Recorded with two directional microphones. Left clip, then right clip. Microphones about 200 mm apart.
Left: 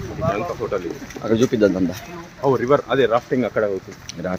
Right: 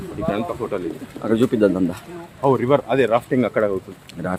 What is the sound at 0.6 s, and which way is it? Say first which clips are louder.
Speech: left 2 dB; 55° right (ahead or behind).